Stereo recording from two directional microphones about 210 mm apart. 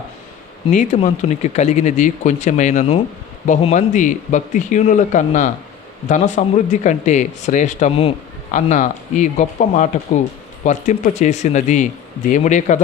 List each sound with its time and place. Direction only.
0.7 s speech: 35° left (ahead or behind)